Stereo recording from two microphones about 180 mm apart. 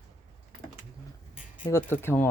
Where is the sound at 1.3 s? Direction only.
50° left (ahead or behind).